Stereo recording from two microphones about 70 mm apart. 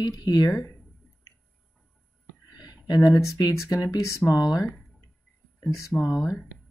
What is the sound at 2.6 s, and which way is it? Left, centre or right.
Speech, left.